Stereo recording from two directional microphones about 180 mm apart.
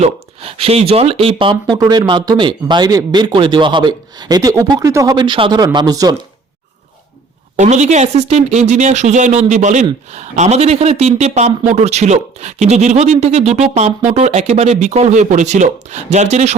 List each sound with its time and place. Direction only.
0.0 s a man's voice: 35° right (ahead or behind)
7.5 s a man's voice: 40° right (ahead or behind)